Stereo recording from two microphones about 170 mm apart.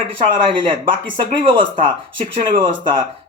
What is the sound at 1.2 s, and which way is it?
Speech, 30° right (ahead or behind).